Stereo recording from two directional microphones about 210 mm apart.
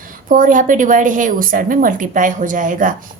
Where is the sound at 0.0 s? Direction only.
40° right (ahead or behind).